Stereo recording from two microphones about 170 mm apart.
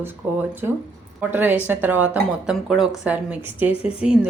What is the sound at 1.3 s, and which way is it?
A woman's voice, 10° right (ahead or behind).